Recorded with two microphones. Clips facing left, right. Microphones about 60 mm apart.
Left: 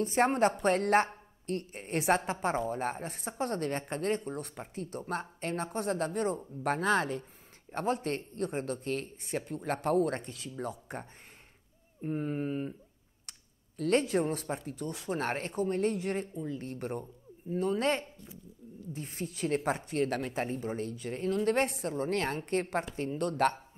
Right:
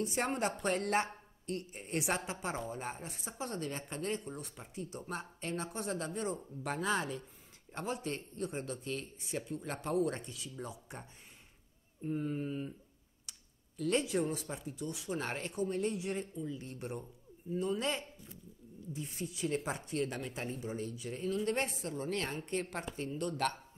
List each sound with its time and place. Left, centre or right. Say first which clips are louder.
0.0 s a woman's voice: left 8 dB; left